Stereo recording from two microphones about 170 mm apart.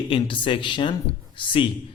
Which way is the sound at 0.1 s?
30° left (ahead or behind).